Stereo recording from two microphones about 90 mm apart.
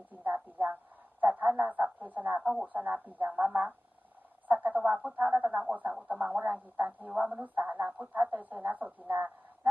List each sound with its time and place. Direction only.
0.1 s a sound: 20° right (ahead or behind)
2.4 s a woman's voice: 5° right (ahead or behind)
2.7 s speech: 20° right (ahead or behind)